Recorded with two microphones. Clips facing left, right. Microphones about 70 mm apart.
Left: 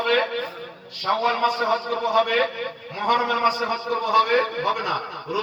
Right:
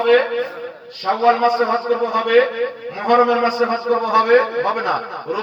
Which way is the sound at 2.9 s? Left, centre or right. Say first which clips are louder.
Right 7 dB; right.